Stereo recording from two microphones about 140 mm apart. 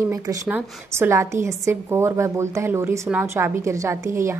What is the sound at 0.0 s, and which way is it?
A woman's voice, 20° right (ahead or behind).